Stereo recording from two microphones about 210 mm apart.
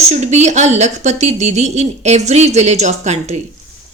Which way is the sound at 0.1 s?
35° right (ahead or behind).